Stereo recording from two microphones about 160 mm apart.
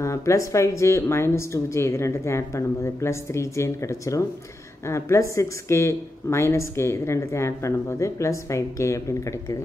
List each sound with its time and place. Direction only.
0.0 s a woman's voice: 20° left (ahead or behind)